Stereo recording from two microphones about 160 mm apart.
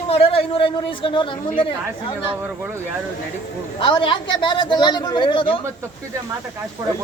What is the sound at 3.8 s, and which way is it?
Speech, 30° left (ahead or behind).